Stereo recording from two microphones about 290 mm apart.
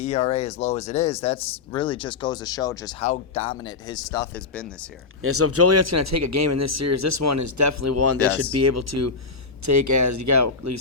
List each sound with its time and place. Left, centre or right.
0.0 s speech: left; by 4.7 s centre
5.2 s speech: right
9.6 s speech: right